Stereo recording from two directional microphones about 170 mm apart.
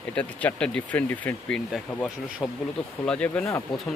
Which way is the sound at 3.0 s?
5° left (ahead or behind).